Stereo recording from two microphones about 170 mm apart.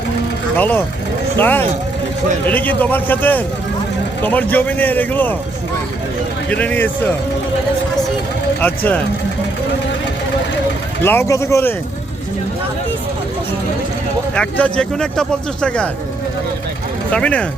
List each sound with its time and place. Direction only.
0.5 s a man's voice: 10° left (ahead or behind)
6.5 s a man's voice: 10° left (ahead or behind)
8.6 s a man's voice: 10° left (ahead or behind)
11.0 s a man's voice: 15° left (ahead or behind)
14.3 s speech: 5° left (ahead or behind)
17.1 s a man's voice: 5° left (ahead or behind)